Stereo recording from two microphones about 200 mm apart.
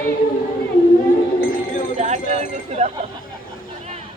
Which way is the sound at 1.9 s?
35° right (ahead or behind).